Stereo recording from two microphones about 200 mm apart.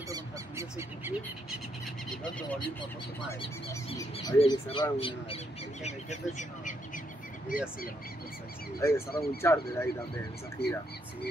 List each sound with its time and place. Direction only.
0.1 s a sound: 15° right (ahead or behind)
4.3 s speech: 25° left (ahead or behind); by 7.7 s 45° left (ahead or behind)
8.7 s speech: 15° left (ahead or behind)
9.1 s speech: 50° left (ahead or behind)
9.4 s speech: 15° left (ahead or behind)
10.6 s speech: 55° left (ahead or behind)